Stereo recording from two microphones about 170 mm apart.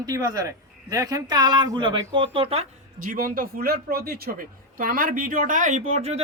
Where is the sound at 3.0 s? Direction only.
55° right (ahead or behind).